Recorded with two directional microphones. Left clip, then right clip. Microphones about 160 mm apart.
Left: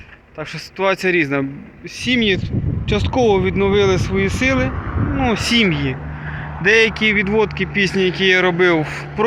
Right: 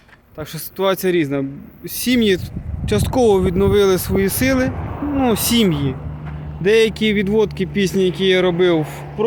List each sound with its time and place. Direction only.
0.3 s speech: 35° right (ahead or behind)
2.0 s speech: 65° right (ahead or behind); by 5.8 s 45° right (ahead or behind)
6.6 s speech: 35° right (ahead or behind)